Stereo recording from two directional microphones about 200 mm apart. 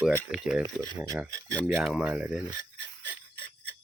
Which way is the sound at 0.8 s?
15° right (ahead or behind).